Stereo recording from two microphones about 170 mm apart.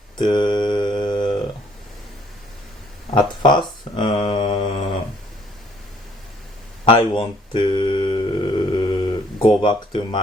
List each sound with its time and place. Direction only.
0.2 s mantra: 25° left (ahead or behind)
3.4 s mantra: 25° left (ahead or behind)
6.8 s mantra: 30° left (ahead or behind)
9.6 s speech: 30° left (ahead or behind)